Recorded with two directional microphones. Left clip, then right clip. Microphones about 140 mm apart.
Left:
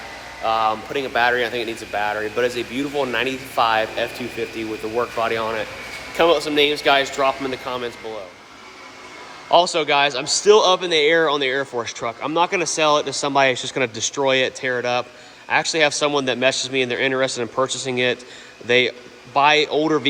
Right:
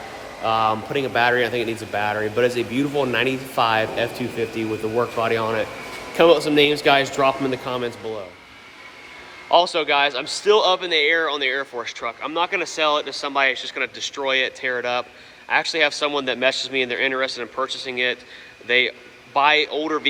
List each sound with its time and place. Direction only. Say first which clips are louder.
0.4 s speech: even; 10° right (ahead or behind)
9.5 s speech: left 1 dB; 15° left (ahead or behind)
11.6 s speech: left 4 dB; 10° left (ahead or behind)
11.9 s a man's voice: left 3 dB; 25° left (ahead or behind)